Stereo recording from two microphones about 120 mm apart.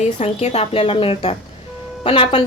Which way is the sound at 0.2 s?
65° left (ahead or behind).